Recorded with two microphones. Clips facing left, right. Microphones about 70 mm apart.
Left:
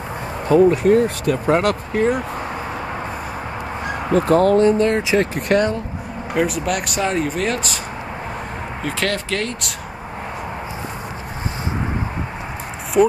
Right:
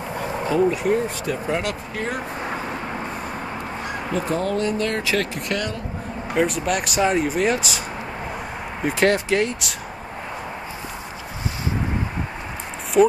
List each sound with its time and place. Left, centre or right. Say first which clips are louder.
0.5 s speech: left 7 dB; left
4.1 s speech: left 10 dB; left
4.6 s speech: left 8 dB; left
6.3 s speech: left 1 dB; centre
8.8 s speech: right 4 dB; centre
13.0 s speech: left 1 dB; centre